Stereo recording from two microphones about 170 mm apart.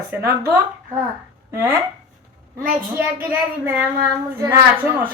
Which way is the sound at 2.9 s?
10° right (ahead or behind).